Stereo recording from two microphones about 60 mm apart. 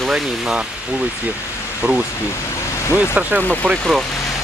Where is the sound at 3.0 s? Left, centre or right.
Right.